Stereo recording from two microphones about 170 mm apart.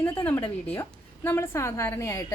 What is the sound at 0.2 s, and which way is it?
A woman's voice, 15° left (ahead or behind).